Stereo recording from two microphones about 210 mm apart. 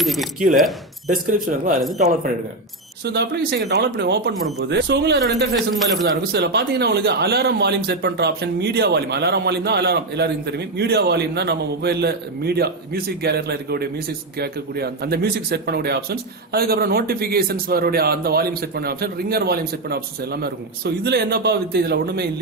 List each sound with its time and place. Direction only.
0.0 s speech: centre (ahead or behind)
1.1 s speech: 40° right (ahead or behind)
3.0 s speech: 50° right (ahead or behind)